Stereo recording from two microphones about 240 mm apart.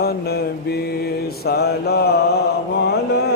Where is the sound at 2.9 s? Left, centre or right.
Left.